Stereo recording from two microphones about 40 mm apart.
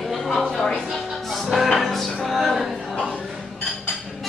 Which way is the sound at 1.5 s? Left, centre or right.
Centre.